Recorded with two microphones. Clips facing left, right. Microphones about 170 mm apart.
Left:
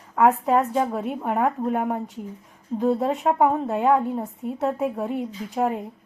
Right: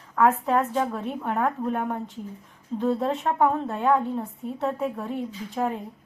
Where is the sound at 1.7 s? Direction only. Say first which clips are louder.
Left 3 dB; 5° left (ahead or behind).